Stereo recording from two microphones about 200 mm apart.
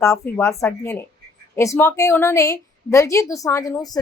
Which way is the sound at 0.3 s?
15° left (ahead or behind).